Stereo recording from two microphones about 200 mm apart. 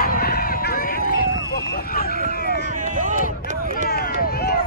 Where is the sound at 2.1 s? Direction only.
45° right (ahead or behind).